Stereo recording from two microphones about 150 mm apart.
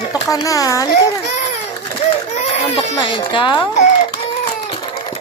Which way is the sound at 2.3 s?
45° left (ahead or behind).